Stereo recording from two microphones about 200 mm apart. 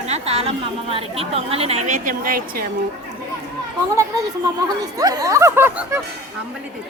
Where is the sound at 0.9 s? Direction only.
30° right (ahead or behind); by 2.6 s 45° right (ahead or behind).